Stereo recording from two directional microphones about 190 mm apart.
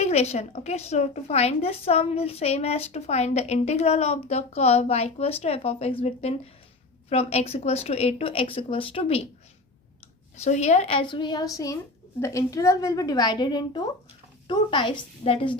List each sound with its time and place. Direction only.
0.0 s a woman's voice: 35° left (ahead or behind)
10.3 s a woman's voice: 35° left (ahead or behind)